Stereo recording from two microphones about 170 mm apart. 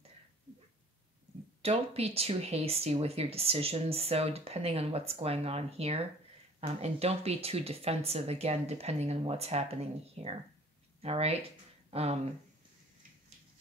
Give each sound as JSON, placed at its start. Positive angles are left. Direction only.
{"t": 1.6, "sound": "speech", "side_deg": -35}